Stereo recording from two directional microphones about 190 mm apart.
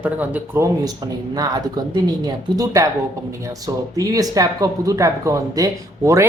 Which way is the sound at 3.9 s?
20° right (ahead or behind).